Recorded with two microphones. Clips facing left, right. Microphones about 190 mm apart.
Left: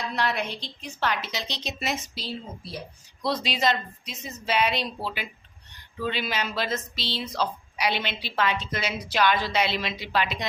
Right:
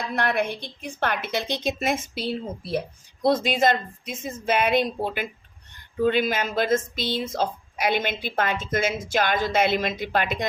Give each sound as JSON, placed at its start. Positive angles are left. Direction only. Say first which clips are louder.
{"t": 0.1, "sound": "a woman's voice", "louder": "right 6 dB", "side_deg": -55}